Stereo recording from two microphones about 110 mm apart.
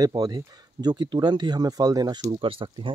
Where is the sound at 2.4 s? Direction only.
55° right (ahead or behind).